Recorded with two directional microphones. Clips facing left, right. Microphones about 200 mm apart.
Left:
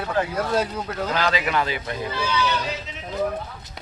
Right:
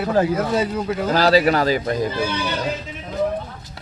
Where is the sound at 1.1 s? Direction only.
35° right (ahead or behind).